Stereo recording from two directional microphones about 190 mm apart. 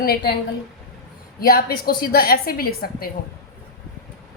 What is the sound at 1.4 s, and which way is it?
A woman's voice, 50° left (ahead or behind).